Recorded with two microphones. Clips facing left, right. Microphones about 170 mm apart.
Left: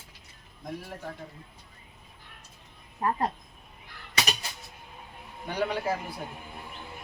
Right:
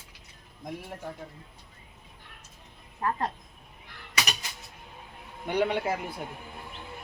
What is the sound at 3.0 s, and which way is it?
Speech, 20° left (ahead or behind).